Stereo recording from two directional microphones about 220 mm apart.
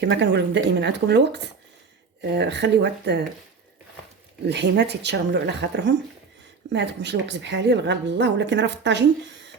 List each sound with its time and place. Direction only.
0.0 s a woman's voice: 50° right (ahead or behind)
4.4 s a woman's voice: 50° right (ahead or behind)